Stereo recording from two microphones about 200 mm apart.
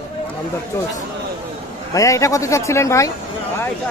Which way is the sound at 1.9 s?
15° left (ahead or behind).